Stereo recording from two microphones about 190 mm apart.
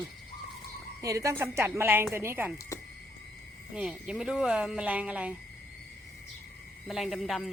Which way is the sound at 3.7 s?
5° right (ahead or behind).